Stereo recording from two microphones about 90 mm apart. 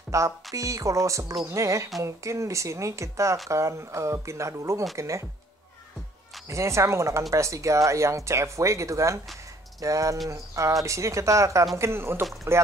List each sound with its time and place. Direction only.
0.1 s speech: 35° right (ahead or behind)
6.5 s speech: 35° right (ahead or behind)